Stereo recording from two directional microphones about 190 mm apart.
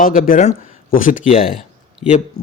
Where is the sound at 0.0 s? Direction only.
45° left (ahead or behind).